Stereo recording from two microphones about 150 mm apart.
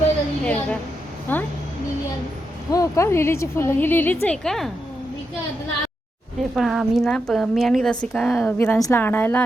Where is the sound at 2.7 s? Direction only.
20° left (ahead or behind); by 4.7 s 5° left (ahead or behind).